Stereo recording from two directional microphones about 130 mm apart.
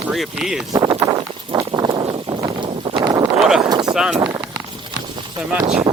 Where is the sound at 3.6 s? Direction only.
30° right (ahead or behind).